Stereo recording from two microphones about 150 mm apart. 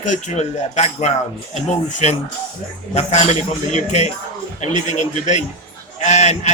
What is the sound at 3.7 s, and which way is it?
Speech, 50° left (ahead or behind).